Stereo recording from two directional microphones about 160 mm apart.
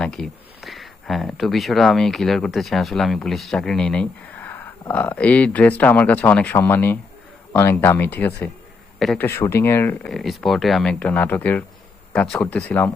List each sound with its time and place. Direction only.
0.0 s speech: 5° left (ahead or behind)
10.1 s speech: centre (ahead or behind)